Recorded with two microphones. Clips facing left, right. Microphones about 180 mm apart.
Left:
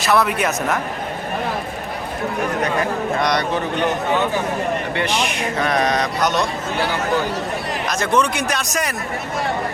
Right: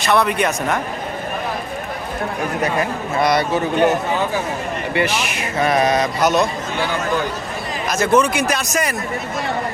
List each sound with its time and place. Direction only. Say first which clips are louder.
0.0 s speech: right 1 dB; 5° left (ahead or behind)
3.2 s a man's voice: right 6 dB; 5° right (ahead or behind)
4.9 s speech: right 1 dB; 5° right (ahead or behind)
7.9 s speech: right 4 dB; 5° right (ahead or behind)